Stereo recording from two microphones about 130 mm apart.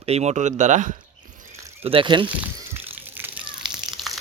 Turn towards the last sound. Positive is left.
turn(degrees=0)  # may be behind; listen again after turning